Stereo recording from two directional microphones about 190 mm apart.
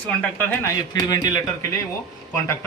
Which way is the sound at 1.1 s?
20° left (ahead or behind).